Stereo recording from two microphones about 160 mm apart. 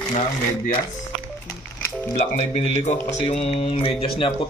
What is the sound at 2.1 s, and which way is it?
Speech, 40° left (ahead or behind).